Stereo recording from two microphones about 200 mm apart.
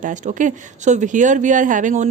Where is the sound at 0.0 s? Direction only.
40° right (ahead or behind).